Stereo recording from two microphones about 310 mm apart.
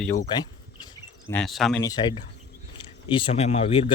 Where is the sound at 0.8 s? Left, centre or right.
Centre.